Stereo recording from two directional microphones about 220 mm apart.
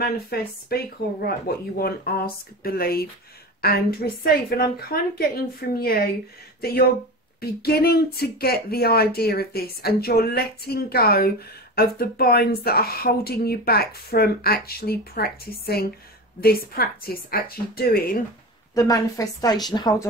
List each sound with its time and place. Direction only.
0.0 s speech: 45° left (ahead or behind)
18.8 s speech: 15° left (ahead or behind)